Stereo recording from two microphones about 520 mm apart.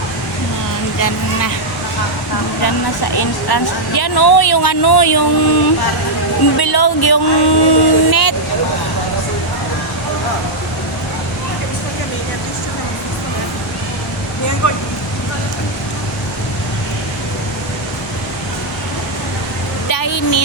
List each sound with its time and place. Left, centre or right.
0.9 s speech: left
3.2 s speech: left
14.6 s vehicle: left
19.9 s a sound: left